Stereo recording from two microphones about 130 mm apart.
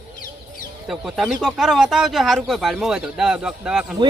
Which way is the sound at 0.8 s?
5° right (ahead or behind).